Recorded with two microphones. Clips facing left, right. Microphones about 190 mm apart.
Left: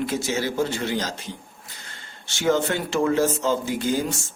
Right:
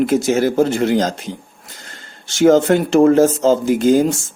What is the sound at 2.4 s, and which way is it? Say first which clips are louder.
Speech: right 10 dB; 45° right (ahead or behind).